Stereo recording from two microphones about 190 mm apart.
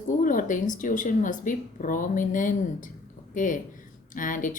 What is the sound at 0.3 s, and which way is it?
Speech, 45° left (ahead or behind).